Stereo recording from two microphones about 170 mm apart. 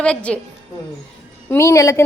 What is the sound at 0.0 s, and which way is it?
Speech, 5° left (ahead or behind).